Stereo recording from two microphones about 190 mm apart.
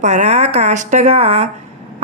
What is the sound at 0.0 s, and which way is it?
A woman's voice, 35° right (ahead or behind).